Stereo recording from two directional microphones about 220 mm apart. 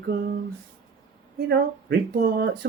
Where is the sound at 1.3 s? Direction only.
50° right (ahead or behind).